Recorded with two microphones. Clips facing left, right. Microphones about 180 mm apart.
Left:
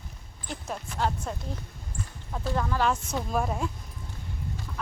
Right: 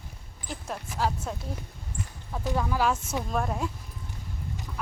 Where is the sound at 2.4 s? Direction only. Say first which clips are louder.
Even; 10° right (ahead or behind).